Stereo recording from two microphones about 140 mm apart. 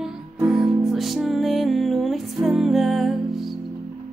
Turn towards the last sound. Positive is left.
turn(degrees=0)  # may be behind; listen again after turning